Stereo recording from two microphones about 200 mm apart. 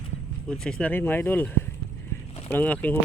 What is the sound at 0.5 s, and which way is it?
Speech, 5° left (ahead or behind).